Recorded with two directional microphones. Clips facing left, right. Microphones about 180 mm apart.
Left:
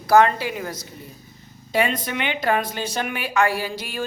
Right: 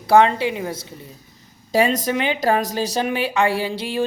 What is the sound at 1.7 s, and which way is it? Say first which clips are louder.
Speech: right 4 dB; 40° right (ahead or behind).